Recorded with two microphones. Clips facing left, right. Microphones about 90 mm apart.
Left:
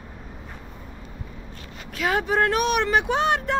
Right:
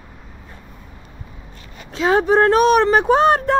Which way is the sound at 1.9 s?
30° right (ahead or behind).